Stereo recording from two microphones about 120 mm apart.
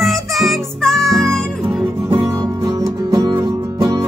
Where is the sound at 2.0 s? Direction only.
25° right (ahead or behind).